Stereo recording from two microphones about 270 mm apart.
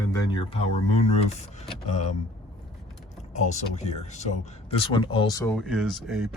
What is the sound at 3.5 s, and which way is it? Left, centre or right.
Speech, left.